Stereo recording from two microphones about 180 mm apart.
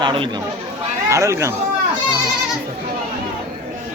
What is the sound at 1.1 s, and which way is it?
Speech, 15° right (ahead or behind).